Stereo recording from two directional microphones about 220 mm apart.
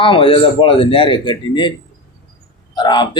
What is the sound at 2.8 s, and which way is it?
Speech, 20° left (ahead or behind).